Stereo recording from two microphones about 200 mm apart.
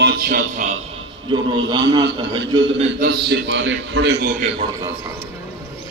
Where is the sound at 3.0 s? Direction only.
55° right (ahead or behind).